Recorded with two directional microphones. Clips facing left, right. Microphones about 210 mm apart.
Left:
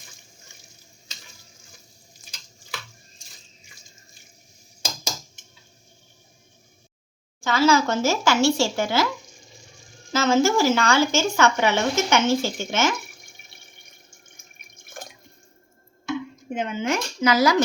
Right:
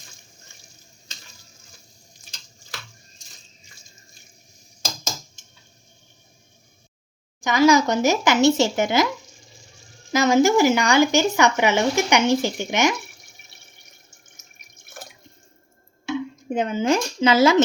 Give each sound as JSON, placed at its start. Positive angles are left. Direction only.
{"t": 7.4, "sound": "speech", "side_deg": -15}
{"t": 10.1, "sound": "speech", "side_deg": -15}
{"t": 16.6, "sound": "speech", "side_deg": -40}